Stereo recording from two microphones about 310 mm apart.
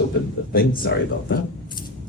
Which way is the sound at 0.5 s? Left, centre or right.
Left.